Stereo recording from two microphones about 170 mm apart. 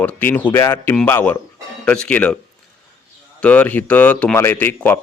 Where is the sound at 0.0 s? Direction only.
10° left (ahead or behind).